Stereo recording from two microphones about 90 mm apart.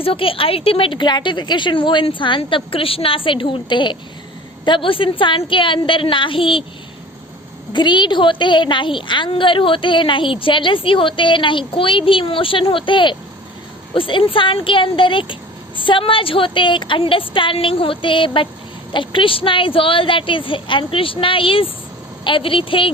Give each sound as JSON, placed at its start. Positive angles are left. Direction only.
{"t": 0.0, "sound": "a woman's voice", "side_deg": 90}
{"t": 7.7, "sound": "a woman's voice", "side_deg": 60}
{"t": 22.2, "sound": "a woman's voice", "side_deg": 70}